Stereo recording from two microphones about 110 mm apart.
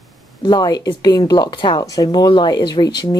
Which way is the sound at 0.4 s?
40° left (ahead or behind).